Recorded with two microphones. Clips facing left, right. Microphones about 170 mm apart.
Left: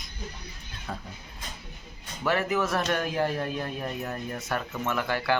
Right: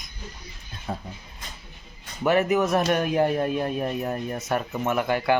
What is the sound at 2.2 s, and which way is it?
Speech, 20° right (ahead or behind).